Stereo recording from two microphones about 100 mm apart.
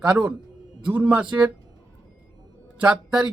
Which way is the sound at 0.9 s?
15° right (ahead or behind).